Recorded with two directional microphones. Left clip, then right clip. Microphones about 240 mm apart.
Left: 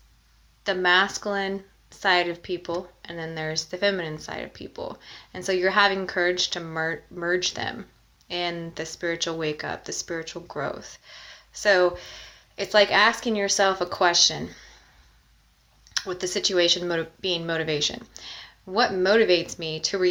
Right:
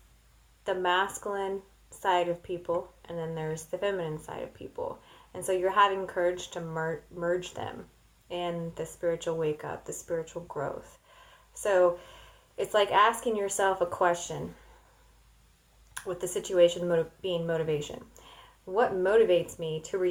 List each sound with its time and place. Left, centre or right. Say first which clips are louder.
0.6 s speech: left 7 dB; left
16.0 s speech: left 7 dB; left